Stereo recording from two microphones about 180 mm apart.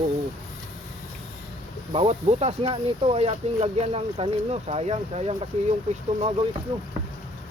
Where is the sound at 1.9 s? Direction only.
35° right (ahead or behind).